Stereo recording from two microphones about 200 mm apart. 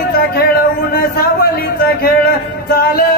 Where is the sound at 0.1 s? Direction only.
50° left (ahead or behind).